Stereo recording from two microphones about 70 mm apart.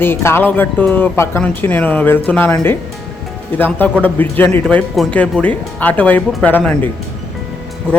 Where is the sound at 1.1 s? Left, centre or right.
Left.